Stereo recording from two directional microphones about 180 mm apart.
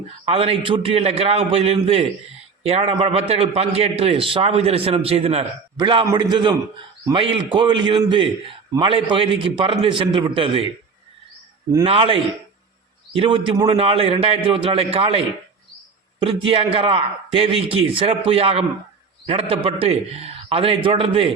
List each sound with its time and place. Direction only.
0.3 s a man's voice: 30° right (ahead or behind)
11.9 s a man's voice: 30° right (ahead or behind)
16.5 s a man's voice: 30° right (ahead or behind)